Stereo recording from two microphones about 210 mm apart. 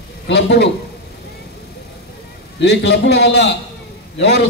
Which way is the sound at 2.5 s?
55° left (ahead or behind).